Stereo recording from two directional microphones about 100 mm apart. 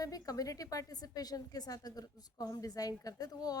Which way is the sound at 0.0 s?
35° left (ahead or behind).